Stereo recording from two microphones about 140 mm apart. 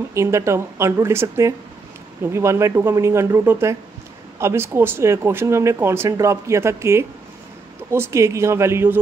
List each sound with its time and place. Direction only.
0.1 s speech: 20° right (ahead or behind)